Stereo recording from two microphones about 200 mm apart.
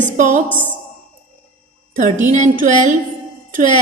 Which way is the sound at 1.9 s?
40° right (ahead or behind).